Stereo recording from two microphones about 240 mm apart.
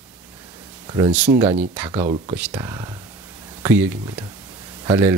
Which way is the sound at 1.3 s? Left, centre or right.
Right.